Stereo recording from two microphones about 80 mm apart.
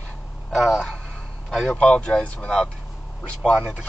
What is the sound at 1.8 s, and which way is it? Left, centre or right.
Speech, centre.